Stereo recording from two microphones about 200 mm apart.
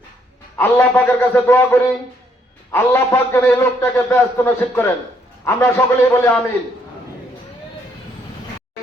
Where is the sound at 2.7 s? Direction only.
10° left (ahead or behind).